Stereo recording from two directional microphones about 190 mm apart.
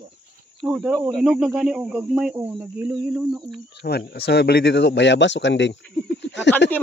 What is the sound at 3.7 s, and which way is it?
Speech, 60° left (ahead or behind).